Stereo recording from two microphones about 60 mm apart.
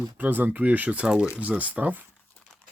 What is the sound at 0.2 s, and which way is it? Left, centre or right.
Speech, right.